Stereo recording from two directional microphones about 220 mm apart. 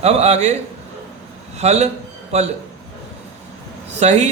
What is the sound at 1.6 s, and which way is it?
Speech, 30° right (ahead or behind).